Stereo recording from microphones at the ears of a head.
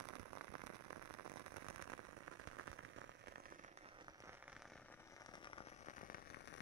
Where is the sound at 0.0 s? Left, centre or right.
Right.